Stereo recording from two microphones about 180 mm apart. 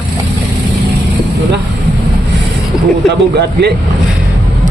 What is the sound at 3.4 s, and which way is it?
Speech, 65° right (ahead or behind).